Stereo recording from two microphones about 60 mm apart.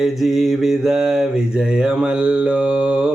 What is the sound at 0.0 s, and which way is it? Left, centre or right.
Mantra, centre.